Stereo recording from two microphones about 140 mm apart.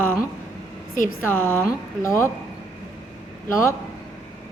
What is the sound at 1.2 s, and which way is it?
A woman's voice, 15° left (ahead or behind).